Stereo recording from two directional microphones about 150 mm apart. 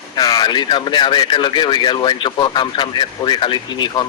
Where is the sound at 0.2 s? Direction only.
25° left (ahead or behind).